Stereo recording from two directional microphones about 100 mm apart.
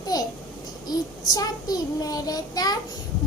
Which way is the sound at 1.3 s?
40° left (ahead or behind).